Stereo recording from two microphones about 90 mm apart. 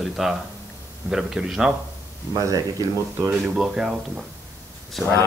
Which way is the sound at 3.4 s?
5° right (ahead or behind).